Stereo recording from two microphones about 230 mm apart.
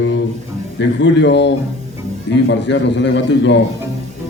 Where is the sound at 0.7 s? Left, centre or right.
Left.